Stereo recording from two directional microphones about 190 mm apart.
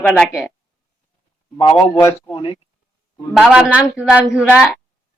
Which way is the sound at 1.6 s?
15° left (ahead or behind).